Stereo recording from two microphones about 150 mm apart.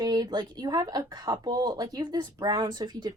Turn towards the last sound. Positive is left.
turn(degrees=-25)  # may be behind; listen again after turning